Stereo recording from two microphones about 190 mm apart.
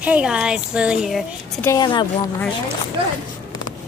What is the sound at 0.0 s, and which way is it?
Speech, 5° right (ahead or behind).